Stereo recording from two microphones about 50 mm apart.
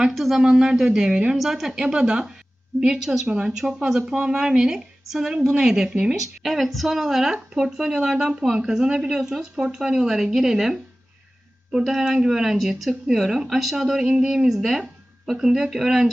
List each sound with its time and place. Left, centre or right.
0.0 s a woman's voice: centre
1.4 s a woman's voice: centre
3.2 s a woman's voice: centre
6.4 s a woman's voice: centre
11.8 s a woman's voice: centre
14.0 s a woman's voice: centre